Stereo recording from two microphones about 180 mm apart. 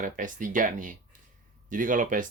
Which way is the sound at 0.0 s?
45° right (ahead or behind).